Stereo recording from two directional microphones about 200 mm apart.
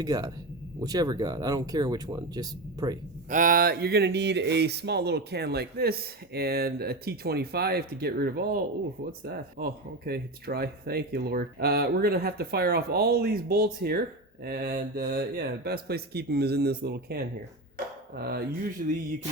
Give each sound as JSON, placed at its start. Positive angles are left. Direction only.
{"t": 0.0, "sound": "speech", "side_deg": -20}
{"t": 3.2, "sound": "a man's voice", "side_deg": -40}